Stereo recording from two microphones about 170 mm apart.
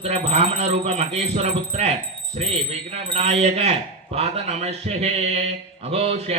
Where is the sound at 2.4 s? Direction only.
35° right (ahead or behind).